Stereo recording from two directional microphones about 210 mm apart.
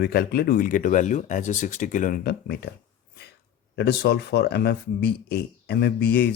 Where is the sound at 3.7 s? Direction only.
50° left (ahead or behind).